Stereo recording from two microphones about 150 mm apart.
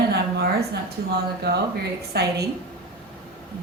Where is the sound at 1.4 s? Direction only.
90° right.